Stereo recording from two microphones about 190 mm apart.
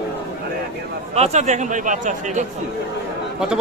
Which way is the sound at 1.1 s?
35° right (ahead or behind).